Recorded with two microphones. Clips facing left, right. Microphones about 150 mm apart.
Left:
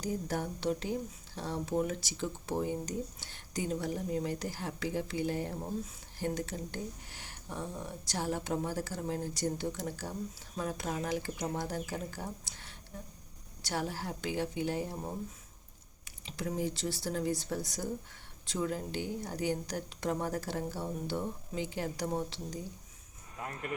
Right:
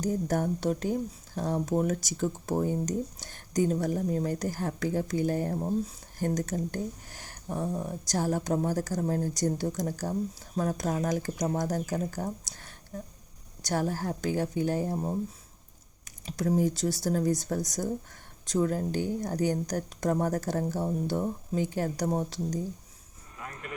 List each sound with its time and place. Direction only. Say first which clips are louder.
0.0 s speech: right 7 dB; 45° right (ahead or behind)
16.0 s speech: right 9 dB; 40° right (ahead or behind)